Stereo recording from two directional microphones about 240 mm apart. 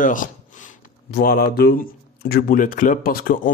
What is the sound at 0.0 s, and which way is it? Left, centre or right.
Speech, left.